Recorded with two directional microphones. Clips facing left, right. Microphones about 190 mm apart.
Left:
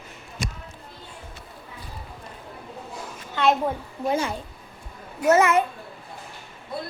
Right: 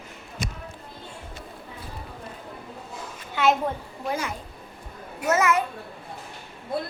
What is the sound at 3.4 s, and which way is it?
Speech, 5° right (ahead or behind).